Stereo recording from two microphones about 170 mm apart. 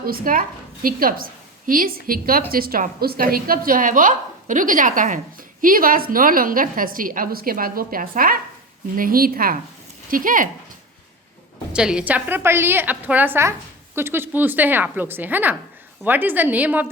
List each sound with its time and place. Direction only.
0.0 s a woman's voice: 60° right (ahead or behind)
11.7 s a woman's voice: 5° right (ahead or behind)